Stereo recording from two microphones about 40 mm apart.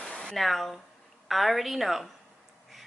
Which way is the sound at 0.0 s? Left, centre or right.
Centre.